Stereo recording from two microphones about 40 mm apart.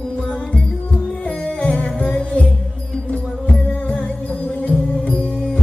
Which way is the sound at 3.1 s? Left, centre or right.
Left.